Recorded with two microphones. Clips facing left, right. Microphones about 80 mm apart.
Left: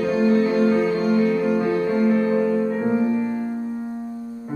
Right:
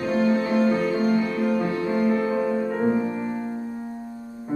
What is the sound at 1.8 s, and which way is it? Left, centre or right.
Music, centre.